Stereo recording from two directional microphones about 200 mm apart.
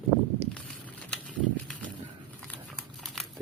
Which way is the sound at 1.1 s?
Centre (ahead or behind).